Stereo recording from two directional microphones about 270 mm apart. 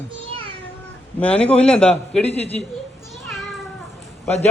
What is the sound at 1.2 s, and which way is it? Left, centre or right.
A man's voice, centre.